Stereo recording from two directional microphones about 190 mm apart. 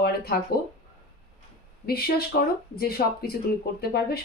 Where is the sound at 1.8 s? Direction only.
55° left (ahead or behind).